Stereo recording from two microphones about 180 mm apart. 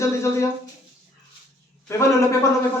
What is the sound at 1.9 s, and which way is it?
Speech, 15° left (ahead or behind).